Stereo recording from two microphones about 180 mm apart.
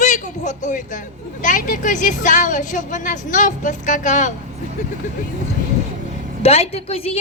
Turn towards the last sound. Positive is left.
turn(degrees=35)  # may be behind; listen again after turning